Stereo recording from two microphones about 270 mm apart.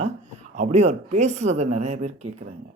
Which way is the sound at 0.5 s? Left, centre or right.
Right.